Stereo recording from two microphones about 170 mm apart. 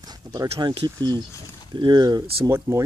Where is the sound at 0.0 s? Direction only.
20° right (ahead or behind).